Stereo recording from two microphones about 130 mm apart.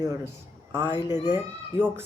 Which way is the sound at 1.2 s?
35° left (ahead or behind).